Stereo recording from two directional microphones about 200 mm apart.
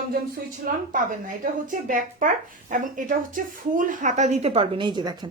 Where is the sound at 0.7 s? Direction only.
45° right (ahead or behind).